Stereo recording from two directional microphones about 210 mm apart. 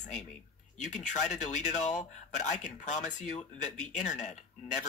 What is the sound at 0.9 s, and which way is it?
Speech, 35° left (ahead or behind).